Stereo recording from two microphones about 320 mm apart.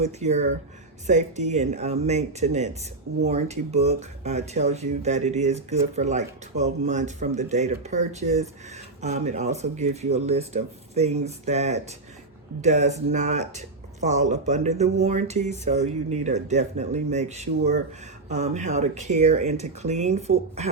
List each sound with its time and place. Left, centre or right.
0.0 s speech: right